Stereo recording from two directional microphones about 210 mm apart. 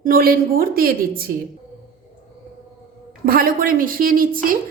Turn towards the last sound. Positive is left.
turn(degrees=-45)  # may be behind; listen again after turning